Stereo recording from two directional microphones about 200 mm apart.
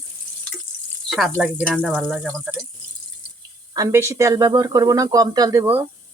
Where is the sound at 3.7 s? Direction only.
15° right (ahead or behind).